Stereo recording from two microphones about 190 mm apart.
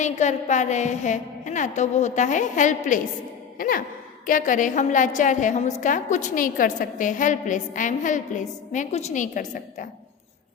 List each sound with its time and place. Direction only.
0.0 s a woman's voice: 40° left (ahead or behind)
3.6 s sigh: 45° left (ahead or behind)
4.3 s a woman's voice: 45° left (ahead or behind)